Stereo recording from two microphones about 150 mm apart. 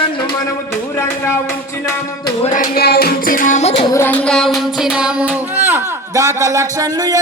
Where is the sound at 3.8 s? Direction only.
20° left (ahead or behind).